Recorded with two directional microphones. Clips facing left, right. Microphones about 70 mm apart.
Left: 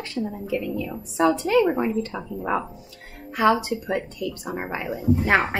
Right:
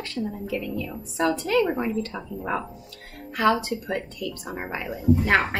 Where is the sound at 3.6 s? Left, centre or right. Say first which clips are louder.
Left 2 dB; centre.